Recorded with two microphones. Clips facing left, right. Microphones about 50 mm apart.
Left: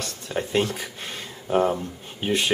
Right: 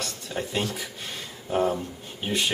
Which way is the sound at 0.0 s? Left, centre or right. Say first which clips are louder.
Left 3 dB; left.